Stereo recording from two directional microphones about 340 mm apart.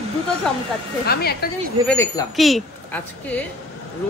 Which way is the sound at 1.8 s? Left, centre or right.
Centre.